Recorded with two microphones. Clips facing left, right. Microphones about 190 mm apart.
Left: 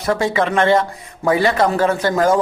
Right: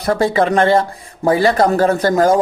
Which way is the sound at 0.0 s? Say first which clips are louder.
Right 3 dB; 35° right (ahead or behind).